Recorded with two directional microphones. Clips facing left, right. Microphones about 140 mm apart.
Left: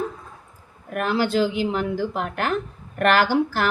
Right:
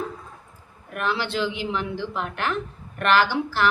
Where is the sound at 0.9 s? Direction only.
45° left (ahead or behind).